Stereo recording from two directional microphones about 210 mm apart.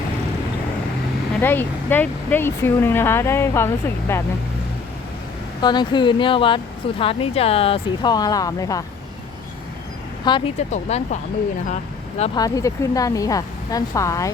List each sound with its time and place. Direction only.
1.4 s speech: 10° left (ahead or behind)
5.6 s speech: 20° left (ahead or behind)
10.3 s speech: 20° left (ahead or behind)
10.7 s speech: 35° left (ahead or behind)
12.2 s speech: 20° left (ahead or behind)